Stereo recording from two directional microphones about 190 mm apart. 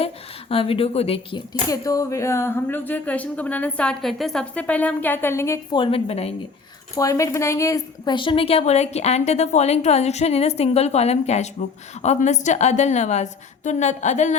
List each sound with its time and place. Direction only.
0.0 s speech: 30° left (ahead or behind); by 5.5 s 15° left (ahead or behind)
5.7 s a woman's voice: 30° left (ahead or behind)
6.9 s a woman's voice: 15° left (ahead or behind); by 14.3 s 40° left (ahead or behind)